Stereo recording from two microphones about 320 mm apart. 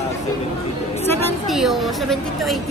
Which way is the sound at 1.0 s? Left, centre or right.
Centre.